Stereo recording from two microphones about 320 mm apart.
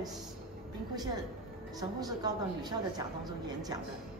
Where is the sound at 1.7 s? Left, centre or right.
Centre.